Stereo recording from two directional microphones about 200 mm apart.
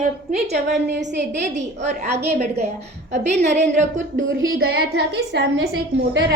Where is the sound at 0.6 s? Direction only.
60° right (ahead or behind).